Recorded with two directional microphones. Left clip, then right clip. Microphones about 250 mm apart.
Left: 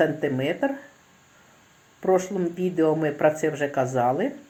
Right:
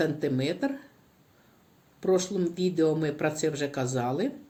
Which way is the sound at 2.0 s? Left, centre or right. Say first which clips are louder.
Left 4 dB; centre.